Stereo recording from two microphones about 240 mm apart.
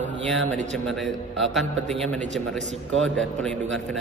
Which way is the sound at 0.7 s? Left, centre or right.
Centre.